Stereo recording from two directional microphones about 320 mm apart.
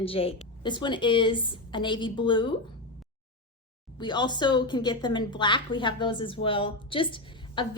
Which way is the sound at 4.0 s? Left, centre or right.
Centre.